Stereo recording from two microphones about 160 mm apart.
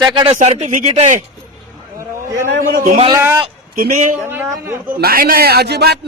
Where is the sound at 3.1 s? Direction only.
15° right (ahead or behind).